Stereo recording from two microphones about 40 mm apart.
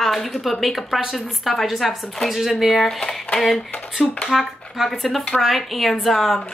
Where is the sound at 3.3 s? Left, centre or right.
Centre.